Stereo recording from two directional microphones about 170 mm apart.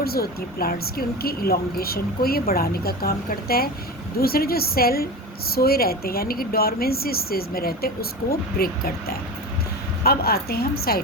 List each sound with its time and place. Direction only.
0.0 s a woman's voice: 65° left (ahead or behind)